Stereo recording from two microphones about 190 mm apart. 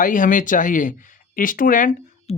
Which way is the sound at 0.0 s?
45° left (ahead or behind).